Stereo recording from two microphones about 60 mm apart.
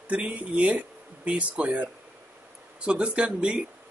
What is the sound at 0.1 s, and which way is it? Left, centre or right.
Speech, right.